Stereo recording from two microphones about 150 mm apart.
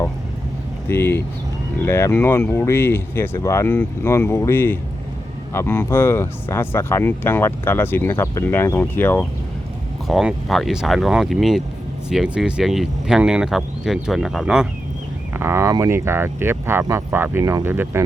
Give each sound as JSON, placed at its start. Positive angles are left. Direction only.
{"t": 0.9, "sound": "speech", "side_deg": 15}
{"t": 10.1, "sound": "speech", "side_deg": 0}
{"t": 15.3, "sound": "speech", "side_deg": -15}